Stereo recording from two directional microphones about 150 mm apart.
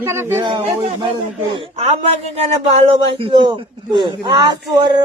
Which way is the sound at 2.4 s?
40° right (ahead or behind).